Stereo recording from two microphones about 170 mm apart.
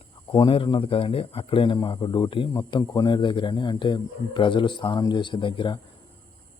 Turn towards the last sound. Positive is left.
turn(degrees=30)  # may be behind; listen again after turning